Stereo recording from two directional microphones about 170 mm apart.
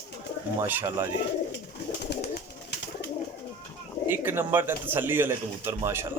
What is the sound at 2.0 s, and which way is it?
Bird, 80° left.